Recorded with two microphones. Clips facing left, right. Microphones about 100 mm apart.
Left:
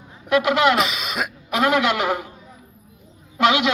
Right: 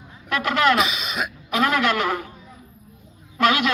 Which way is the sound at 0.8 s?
50° left (ahead or behind).